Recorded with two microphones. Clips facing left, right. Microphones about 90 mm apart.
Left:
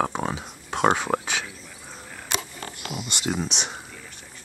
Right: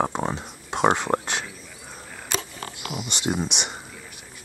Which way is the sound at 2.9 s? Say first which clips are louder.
Right 2 dB; centre (ahead or behind).